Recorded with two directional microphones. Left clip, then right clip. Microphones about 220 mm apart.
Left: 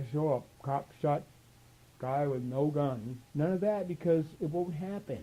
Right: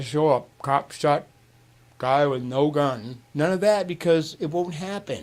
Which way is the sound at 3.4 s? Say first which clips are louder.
Right 11 dB; 20° right (ahead or behind).